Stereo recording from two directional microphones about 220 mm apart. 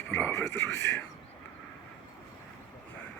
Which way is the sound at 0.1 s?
5° left (ahead or behind).